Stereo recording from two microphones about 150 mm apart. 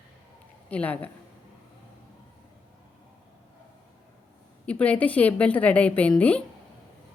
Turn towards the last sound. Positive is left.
turn(degrees=10)  # may be behind; listen again after turning